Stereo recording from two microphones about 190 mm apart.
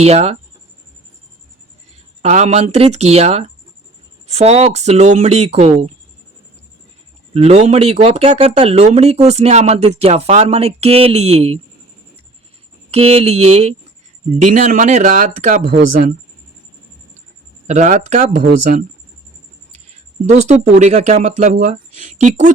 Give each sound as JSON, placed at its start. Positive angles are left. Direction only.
{"t": 0.0, "sound": "speech", "side_deg": -35}
{"t": 2.2, "sound": "speech", "side_deg": -35}
{"t": 7.3, "sound": "speech", "side_deg": -35}
{"t": 12.9, "sound": "speech", "side_deg": -30}
{"t": 17.7, "sound": "speech", "side_deg": -40}
{"t": 20.3, "sound": "speech", "side_deg": -40}